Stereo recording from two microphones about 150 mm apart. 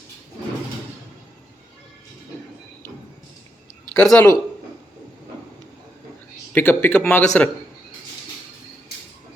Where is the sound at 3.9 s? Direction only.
5° left (ahead or behind).